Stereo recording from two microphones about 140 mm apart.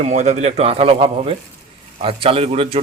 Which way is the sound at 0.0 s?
55° right (ahead or behind).